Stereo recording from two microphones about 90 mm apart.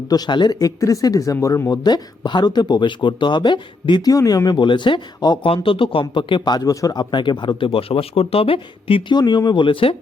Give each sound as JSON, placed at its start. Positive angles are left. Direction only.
{"t": 0.1, "sound": "speech", "side_deg": 55}
{"t": 0.6, "sound": "speech", "side_deg": 40}
{"t": 1.8, "sound": "speech", "side_deg": 55}
{"t": 4.1, "sound": "speech", "side_deg": 40}
{"t": 5.6, "sound": "speech", "side_deg": 75}
{"t": 9.1, "sound": "speech", "side_deg": 50}